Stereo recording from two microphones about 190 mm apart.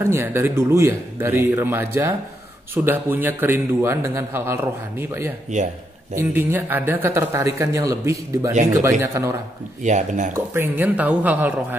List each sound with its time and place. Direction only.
0.0 s speech: 10° right (ahead or behind)
5.5 s speech: 40° right (ahead or behind)
6.1 s speech: 10° right (ahead or behind)
9.8 s speech: 40° right (ahead or behind)
10.3 s speech: 10° right (ahead or behind)